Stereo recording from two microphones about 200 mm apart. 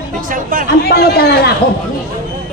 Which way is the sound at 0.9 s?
50° left (ahead or behind).